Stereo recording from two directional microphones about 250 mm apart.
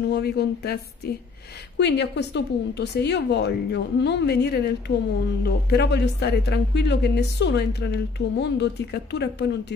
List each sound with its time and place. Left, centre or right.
0.1 s a woman's voice: left